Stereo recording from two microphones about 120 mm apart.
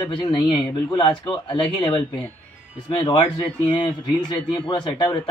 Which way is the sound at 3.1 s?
40° left (ahead or behind).